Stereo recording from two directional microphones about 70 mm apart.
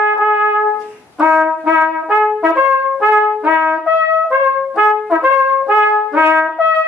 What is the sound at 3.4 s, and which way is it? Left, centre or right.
Trumpet, right.